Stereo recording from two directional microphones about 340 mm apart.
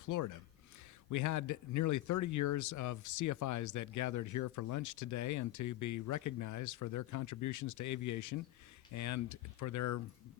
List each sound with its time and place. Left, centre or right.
0.0 s speech: left